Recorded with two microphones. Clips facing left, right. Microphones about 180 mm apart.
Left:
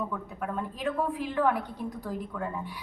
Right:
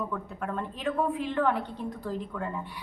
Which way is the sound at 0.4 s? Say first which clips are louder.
Even; 5° left (ahead or behind).